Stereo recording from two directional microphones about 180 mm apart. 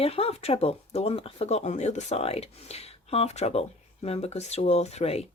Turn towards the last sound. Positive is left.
turn(degrees=35)  # may be behind; listen again after turning